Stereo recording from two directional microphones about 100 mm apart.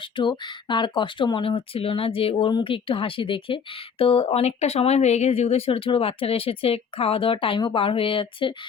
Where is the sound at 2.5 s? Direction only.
55° left (ahead or behind).